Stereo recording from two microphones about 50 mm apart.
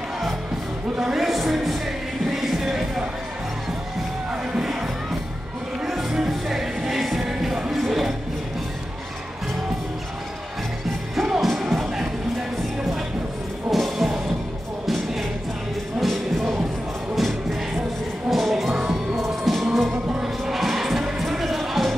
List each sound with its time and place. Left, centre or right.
0.9 s speech: centre
2.2 s music: centre
5.9 s music: centre
11.1 s music: centre
13.7 s music: centre
16.0 s music: centre